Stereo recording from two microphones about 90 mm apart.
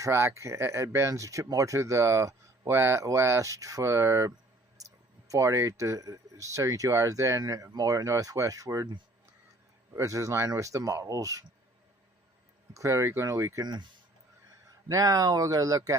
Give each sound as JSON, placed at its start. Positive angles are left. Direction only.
{"t": 0.0, "sound": "speech", "side_deg": -30}
{"t": 5.3, "sound": "speech", "side_deg": -35}
{"t": 9.9, "sound": "speech", "side_deg": -35}
{"t": 12.7, "sound": "speech", "side_deg": -35}
{"t": 13.7, "sound": "speech", "side_deg": -55}
{"t": 14.8, "sound": "speech", "side_deg": -40}